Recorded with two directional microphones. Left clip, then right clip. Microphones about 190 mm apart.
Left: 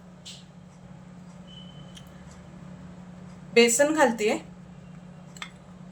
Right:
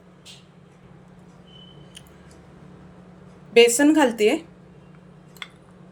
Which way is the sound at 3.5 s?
40° right (ahead or behind).